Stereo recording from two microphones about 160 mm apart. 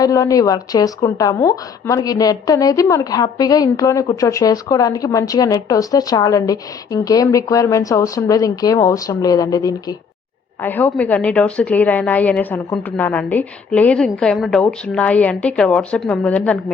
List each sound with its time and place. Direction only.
0.0 s a woman's voice: 20° left (ahead or behind)
10.6 s a woman's voice: 10° left (ahead or behind)